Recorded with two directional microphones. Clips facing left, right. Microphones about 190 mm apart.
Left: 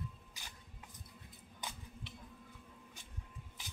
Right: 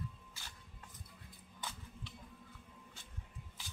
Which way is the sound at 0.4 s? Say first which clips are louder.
Left 1 dB; 15° left (ahead or behind).